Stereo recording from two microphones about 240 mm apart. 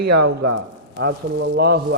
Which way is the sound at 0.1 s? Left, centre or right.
Right.